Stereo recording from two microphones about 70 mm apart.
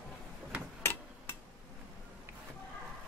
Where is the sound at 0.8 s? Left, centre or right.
Left.